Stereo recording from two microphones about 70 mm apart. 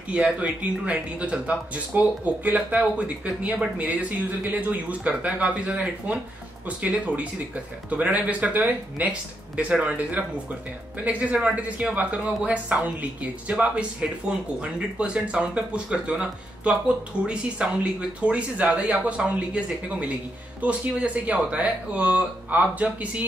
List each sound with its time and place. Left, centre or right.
0.1 s speech: centre
9.6 s speech: centre